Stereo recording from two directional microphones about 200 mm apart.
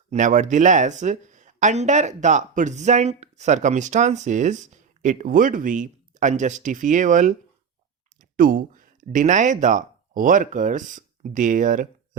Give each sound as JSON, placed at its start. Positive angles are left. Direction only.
{"t": 0.1, "sound": "speech", "side_deg": -40}